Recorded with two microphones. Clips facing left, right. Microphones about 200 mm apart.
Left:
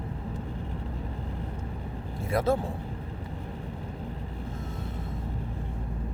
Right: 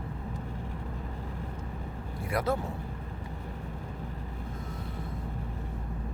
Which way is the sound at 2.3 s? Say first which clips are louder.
Left 4 dB; 25° left (ahead or behind).